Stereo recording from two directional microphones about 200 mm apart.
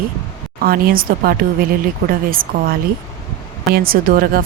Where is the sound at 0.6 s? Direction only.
45° right (ahead or behind).